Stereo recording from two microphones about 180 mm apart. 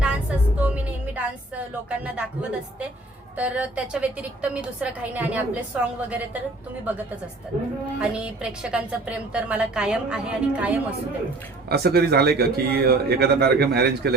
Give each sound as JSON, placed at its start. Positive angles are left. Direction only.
{"t": 0.0, "sound": "music", "side_deg": -5}
{"t": 3.3, "sound": "a woman's voice", "side_deg": -5}
{"t": 8.1, "sound": "a woman's voice", "side_deg": -5}
{"t": 11.7, "sound": "a man's voice", "side_deg": -60}